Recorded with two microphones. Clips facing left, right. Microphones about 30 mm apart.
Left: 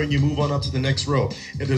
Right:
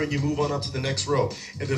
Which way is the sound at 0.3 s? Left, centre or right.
Left.